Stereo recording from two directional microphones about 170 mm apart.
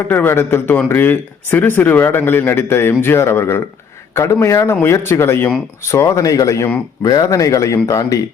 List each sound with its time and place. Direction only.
0.1 s speech: 10° left (ahead or behind)